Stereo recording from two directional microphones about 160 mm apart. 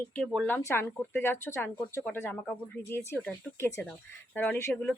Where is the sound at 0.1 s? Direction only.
5° left (ahead or behind).